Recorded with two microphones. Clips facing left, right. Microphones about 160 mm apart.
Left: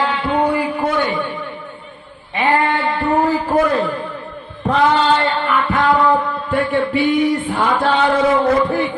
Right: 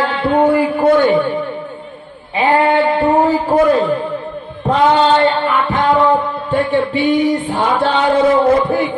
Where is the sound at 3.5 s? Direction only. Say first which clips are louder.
Right 3 dB; 40° right (ahead or behind).